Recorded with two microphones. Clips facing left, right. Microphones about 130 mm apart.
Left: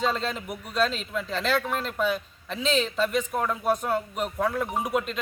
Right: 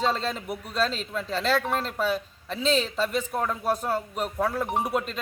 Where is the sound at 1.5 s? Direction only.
35° right (ahead or behind).